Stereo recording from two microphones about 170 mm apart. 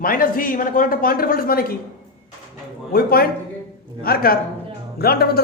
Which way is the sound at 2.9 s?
60° left (ahead or behind).